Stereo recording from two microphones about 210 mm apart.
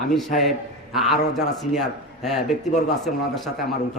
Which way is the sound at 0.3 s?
40° left (ahead or behind).